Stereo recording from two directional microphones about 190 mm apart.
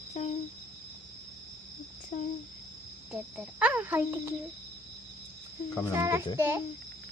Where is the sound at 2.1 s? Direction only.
40° left (ahead or behind).